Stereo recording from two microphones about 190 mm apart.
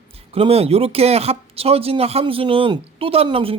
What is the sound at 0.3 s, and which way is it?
Speech, 30° right (ahead or behind).